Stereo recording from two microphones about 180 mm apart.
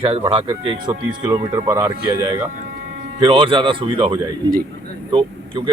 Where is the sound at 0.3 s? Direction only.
30° right (ahead or behind).